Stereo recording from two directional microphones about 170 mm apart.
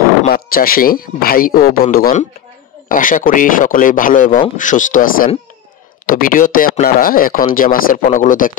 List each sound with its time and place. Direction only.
0.3 s speech: 60° left (ahead or behind)